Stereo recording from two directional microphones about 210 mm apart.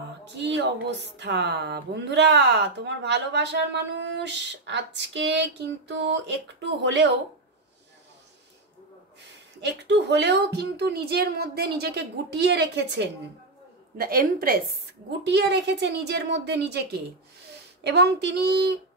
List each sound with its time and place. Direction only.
0.4 s speech: 55° right (ahead or behind)
9.6 s speech: 55° right (ahead or behind)
15.2 s speech: 55° right (ahead or behind)